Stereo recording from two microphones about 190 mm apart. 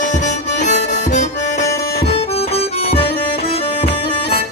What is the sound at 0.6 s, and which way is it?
Accordion, 40° left (ahead or behind).